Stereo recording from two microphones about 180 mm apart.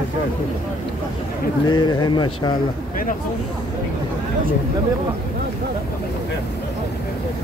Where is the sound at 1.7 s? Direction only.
25° left (ahead or behind).